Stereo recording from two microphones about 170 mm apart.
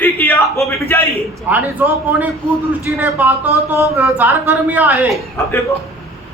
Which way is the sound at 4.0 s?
10° right (ahead or behind).